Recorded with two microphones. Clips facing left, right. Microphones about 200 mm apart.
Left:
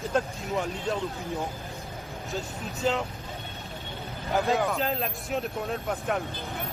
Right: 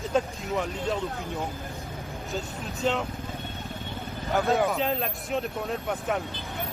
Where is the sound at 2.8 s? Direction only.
Centre (ahead or behind).